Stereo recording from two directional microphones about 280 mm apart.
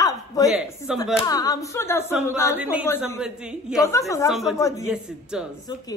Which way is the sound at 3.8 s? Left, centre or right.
Centre.